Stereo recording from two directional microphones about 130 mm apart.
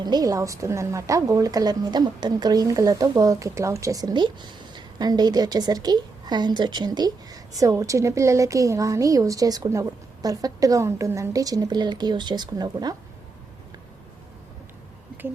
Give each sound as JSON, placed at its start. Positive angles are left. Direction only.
{"t": 0.0, "sound": "a woman's voice", "side_deg": -30}